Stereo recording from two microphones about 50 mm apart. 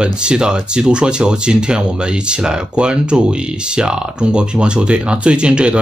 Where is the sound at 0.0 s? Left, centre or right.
Centre.